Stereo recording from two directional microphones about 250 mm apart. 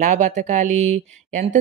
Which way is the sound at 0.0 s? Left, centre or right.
Right.